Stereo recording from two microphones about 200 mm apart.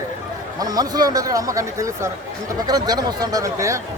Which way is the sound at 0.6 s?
20° right (ahead or behind).